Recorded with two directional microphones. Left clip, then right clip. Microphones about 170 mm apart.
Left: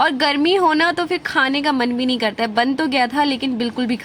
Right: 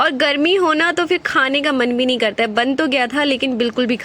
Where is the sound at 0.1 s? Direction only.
15° right (ahead or behind).